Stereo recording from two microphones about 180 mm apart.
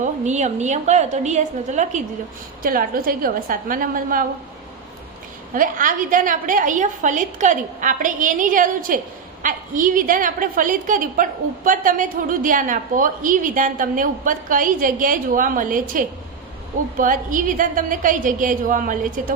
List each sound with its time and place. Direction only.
0.0 s a woman's voice: 40° right (ahead or behind)
2.6 s a woman's voice: 55° right (ahead or behind)
5.5 s a woman's voice: 50° right (ahead or behind)